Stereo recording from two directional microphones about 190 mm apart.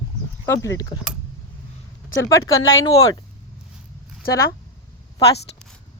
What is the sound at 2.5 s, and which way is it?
Speech, 90° left.